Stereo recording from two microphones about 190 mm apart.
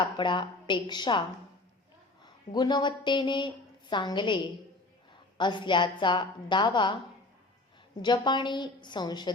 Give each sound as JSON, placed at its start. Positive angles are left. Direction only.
{"t": 0.0, "sound": "a woman's voice", "side_deg": 25}
{"t": 2.2, "sound": "a woman's voice", "side_deg": 20}
{"t": 8.0, "sound": "a woman's voice", "side_deg": 25}